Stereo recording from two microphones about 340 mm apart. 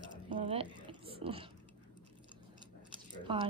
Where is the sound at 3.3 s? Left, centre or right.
Centre.